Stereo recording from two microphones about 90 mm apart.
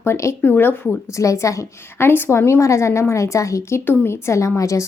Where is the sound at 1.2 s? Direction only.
35° left (ahead or behind).